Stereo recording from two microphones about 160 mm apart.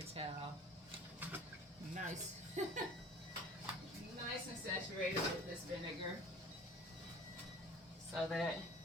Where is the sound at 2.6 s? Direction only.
50° right (ahead or behind).